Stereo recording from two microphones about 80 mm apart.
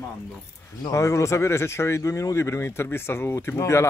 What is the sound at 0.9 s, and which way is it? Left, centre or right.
Speech, left.